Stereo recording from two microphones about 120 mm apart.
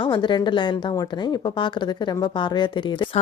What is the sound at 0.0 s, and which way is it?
A woman's voice, 40° left (ahead or behind).